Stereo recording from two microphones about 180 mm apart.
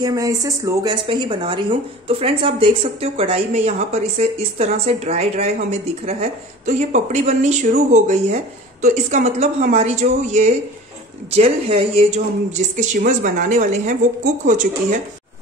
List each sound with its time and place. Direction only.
0.0 s speech: 20° right (ahead or behind); by 15.0 s 45° right (ahead or behind)